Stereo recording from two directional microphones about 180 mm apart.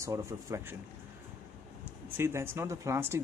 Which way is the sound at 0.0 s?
15° right (ahead or behind).